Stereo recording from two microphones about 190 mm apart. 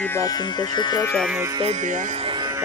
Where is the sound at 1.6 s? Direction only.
35° right (ahead or behind).